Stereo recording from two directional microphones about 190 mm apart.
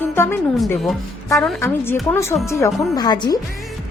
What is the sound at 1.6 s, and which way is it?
A woman's voice, 10° left (ahead or behind).